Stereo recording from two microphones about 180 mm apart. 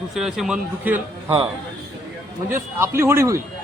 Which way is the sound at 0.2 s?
Centre (ahead or behind).